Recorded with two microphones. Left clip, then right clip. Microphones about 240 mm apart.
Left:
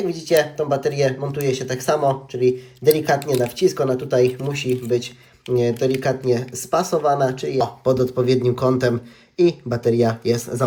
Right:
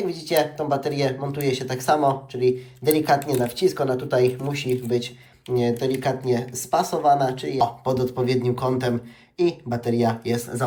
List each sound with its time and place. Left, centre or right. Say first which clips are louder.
0.1 s speech: left 5 dB; centre